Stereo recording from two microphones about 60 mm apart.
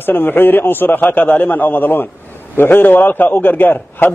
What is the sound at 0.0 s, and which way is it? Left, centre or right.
A man's voice, left.